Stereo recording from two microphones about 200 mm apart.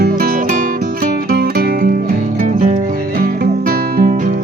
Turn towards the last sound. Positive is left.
turn(degrees=-45)  # may be behind; listen again after turning